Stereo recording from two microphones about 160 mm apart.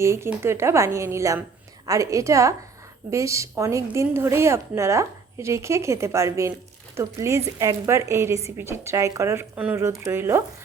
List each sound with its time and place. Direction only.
0.0 s a woman's voice: 15° right (ahead or behind)